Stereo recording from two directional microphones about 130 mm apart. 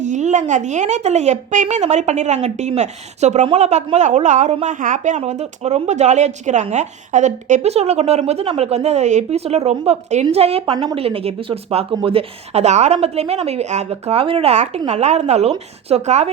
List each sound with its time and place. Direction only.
0.0 s speech: 65° right (ahead or behind)
10.7 s speech: 35° right (ahead or behind)
11.0 s speech: 50° right (ahead or behind)